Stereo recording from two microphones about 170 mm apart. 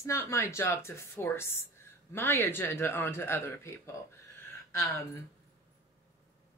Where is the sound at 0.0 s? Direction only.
15° left (ahead or behind).